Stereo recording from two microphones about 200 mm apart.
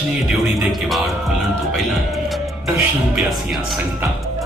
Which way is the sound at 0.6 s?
Centre (ahead or behind).